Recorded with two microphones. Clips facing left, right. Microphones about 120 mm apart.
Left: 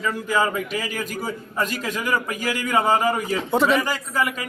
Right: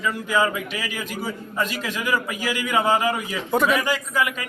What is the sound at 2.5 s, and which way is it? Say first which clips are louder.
Speech: left 1 dB; 5° right (ahead or behind).